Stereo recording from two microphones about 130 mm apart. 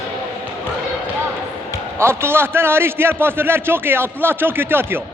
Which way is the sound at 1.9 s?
20° right (ahead or behind).